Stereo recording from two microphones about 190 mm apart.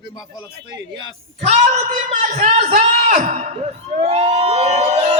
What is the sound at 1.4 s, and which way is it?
Speech, 35° right (ahead or behind).